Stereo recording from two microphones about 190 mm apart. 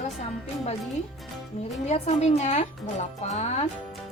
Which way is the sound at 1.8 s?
35° left (ahead or behind).